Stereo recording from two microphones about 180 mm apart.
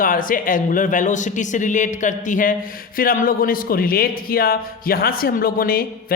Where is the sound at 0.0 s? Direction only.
50° left (ahead or behind).